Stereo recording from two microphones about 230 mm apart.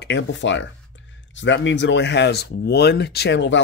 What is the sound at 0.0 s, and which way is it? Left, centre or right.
Speech, left.